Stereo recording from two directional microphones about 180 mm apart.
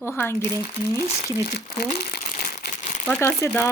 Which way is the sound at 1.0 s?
35° left (ahead or behind).